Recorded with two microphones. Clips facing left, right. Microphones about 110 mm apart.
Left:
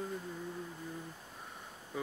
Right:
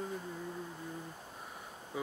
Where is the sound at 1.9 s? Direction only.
10° right (ahead or behind).